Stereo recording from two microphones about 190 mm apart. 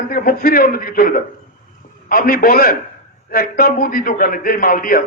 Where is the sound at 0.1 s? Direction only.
50° left (ahead or behind).